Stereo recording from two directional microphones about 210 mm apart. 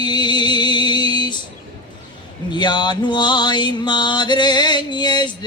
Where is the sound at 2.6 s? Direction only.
20° left (ahead or behind).